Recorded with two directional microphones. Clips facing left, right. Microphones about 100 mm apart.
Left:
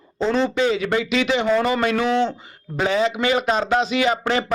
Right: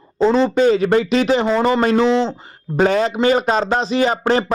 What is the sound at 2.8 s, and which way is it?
Speech, 45° right (ahead or behind).